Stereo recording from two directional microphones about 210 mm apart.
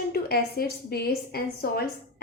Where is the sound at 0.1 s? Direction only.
45° left (ahead or behind).